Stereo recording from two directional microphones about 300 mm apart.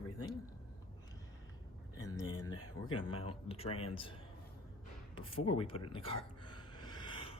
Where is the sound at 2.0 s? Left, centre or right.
Centre.